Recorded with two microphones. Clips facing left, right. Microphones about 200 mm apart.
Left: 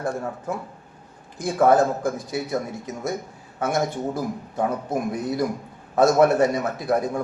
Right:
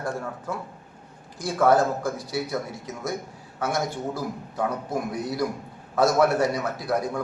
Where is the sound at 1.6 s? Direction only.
20° left (ahead or behind).